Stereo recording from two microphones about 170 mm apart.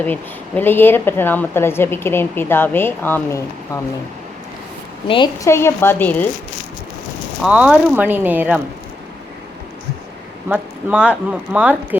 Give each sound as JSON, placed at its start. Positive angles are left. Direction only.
{"t": 0.0, "sound": "speech", "side_deg": 10}
{"t": 5.0, "sound": "a woman's voice", "side_deg": 30}
{"t": 5.5, "sound": "speech", "side_deg": 15}
{"t": 7.4, "sound": "speech", "side_deg": -5}
{"t": 10.5, "sound": "speech", "side_deg": -10}